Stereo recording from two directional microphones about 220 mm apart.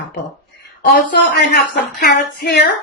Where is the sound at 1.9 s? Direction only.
45° left (ahead or behind).